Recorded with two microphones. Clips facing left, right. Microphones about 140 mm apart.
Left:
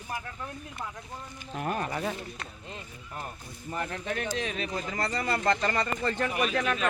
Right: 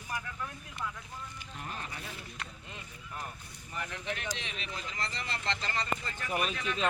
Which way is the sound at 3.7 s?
40° left (ahead or behind).